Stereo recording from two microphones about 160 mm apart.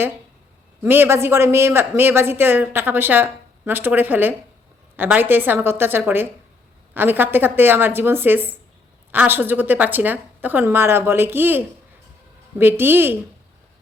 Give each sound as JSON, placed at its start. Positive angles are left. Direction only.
{"t": 0.8, "sound": "a man's voice", "side_deg": -15}